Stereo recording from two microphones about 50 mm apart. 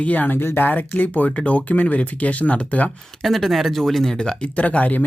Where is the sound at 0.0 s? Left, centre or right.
Left.